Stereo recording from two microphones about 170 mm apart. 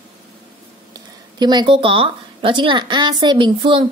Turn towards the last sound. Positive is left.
turn(degrees=-30)  # may be behind; listen again after turning